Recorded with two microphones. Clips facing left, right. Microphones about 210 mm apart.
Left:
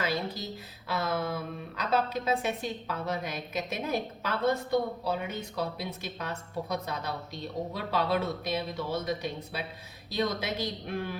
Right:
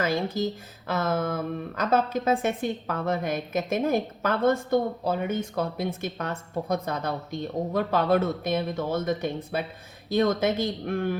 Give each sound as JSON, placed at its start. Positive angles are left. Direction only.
{"t": 0.0, "sound": "a woman's voice", "side_deg": -50}